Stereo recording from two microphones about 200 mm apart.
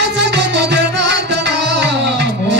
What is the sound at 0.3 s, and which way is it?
Music, 60° right (ahead or behind).